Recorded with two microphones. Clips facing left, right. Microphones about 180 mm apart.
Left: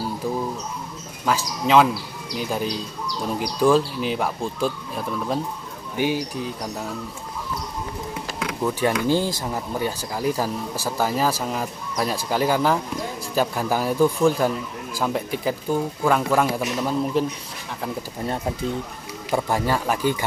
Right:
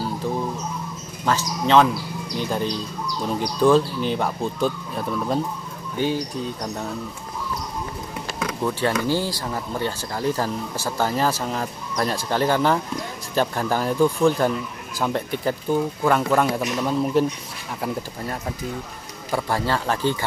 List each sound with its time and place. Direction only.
1.2 s speech: 5° left (ahead or behind)
8.8 s speech: 15° left (ahead or behind)
19.3 s speech: 15° left (ahead or behind)